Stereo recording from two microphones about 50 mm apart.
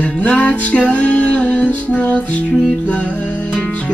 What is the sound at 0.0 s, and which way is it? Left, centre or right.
Music, left.